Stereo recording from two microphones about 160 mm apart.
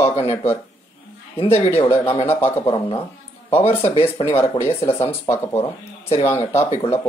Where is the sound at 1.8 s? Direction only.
35° left (ahead or behind).